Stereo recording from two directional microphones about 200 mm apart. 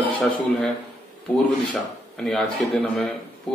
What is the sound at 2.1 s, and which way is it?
A man's voice, 5° left (ahead or behind).